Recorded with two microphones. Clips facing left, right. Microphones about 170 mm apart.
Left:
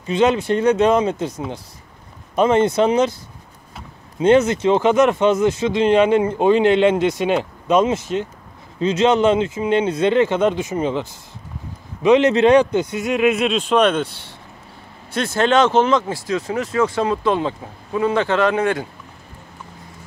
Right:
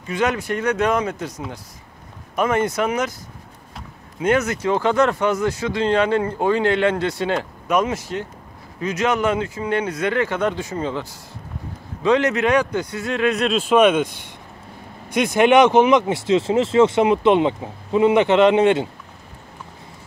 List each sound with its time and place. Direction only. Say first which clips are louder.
0.0 s speech: left 5 dB; 25° left (ahead or behind)
4.2 s a man's voice: left 5 dB; 25° left (ahead or behind); by 18.9 s 20° right (ahead or behind)